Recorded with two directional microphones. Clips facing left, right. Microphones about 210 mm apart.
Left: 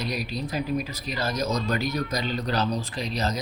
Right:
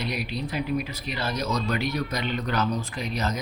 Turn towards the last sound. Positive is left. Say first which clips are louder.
# left 1 dB
turn(degrees=35)  # may be behind; listen again after turning